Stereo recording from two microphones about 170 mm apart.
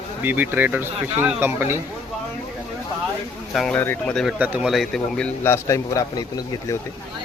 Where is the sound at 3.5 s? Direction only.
5° left (ahead or behind).